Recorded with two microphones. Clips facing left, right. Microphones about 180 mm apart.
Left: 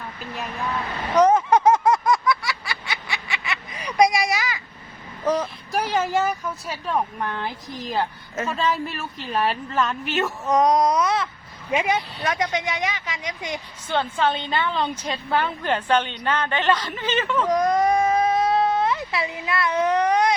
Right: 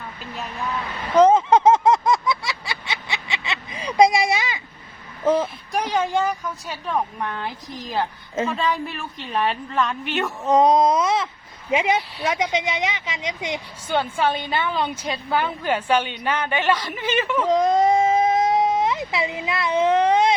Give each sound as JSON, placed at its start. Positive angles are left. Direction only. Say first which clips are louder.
{"t": 1.2, "sound": "a sound", "louder": "right 2 dB", "side_deg": -20}
{"t": 5.2, "sound": "speech", "louder": "right 3 dB", "side_deg": -25}
{"t": 5.7, "sound": "a woman's voice", "louder": "even", "side_deg": 5}
{"t": 10.4, "sound": "speech", "louder": "right 3 dB", "side_deg": -30}
{"t": 13.8, "sound": "a woman's voice", "louder": "right 1 dB", "side_deg": -10}
{"t": 17.5, "sound": "baby cry", "louder": "right 3 dB", "side_deg": -25}